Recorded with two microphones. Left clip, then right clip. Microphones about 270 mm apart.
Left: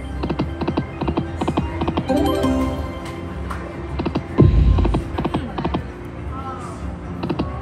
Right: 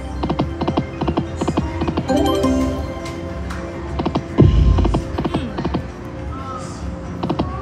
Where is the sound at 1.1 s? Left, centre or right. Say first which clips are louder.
Right 2 dB; centre.